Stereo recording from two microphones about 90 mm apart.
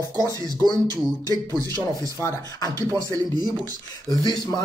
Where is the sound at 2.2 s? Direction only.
35° left (ahead or behind).